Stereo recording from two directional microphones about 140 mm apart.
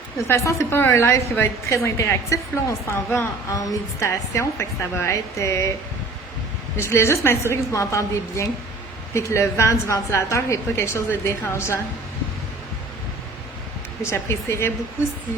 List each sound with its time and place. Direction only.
0.2 s a woman's voice: 20° left (ahead or behind)
6.7 s a woman's voice: 20° left (ahead or behind)
14.0 s a woman's voice: 20° left (ahead or behind)